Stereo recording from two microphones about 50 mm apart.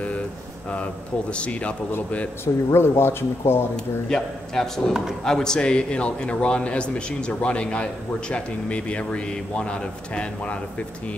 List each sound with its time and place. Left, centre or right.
1.3 s a man's voice: left
2.4 s speech: left
3.7 s a man's voice: centre